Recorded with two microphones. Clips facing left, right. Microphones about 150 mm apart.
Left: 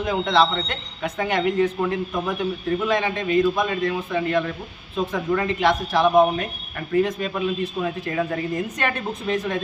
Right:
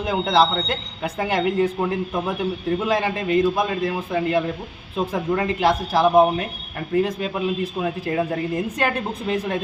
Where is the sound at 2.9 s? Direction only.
35° right (ahead or behind).